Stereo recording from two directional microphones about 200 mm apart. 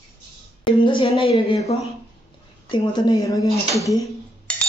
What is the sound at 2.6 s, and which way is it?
Speech, 25° left (ahead or behind).